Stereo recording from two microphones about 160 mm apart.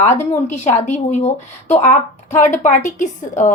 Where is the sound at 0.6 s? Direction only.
45° left (ahead or behind).